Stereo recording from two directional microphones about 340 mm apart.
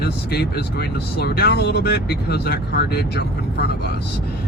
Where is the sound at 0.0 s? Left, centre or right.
Left.